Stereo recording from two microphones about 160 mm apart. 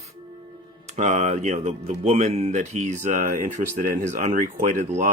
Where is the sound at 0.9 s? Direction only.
50° right (ahead or behind).